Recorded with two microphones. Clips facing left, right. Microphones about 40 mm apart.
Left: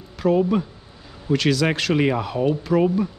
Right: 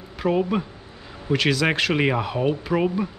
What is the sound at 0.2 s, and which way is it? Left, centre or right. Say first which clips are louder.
Speech: left 3 dB; centre.